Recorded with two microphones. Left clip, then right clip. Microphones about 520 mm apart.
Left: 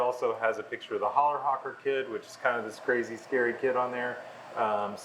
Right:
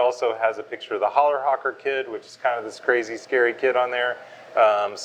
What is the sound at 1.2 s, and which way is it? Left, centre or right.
Speech, right.